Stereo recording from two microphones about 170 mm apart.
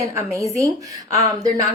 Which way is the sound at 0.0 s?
15° right (ahead or behind).